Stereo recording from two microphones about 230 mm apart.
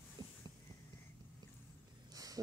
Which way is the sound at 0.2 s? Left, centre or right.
Centre.